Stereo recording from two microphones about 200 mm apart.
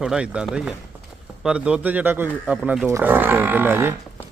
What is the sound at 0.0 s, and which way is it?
Speech, 5° right (ahead or behind).